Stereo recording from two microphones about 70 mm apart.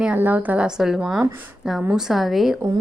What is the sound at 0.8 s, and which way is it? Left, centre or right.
A woman's voice, centre.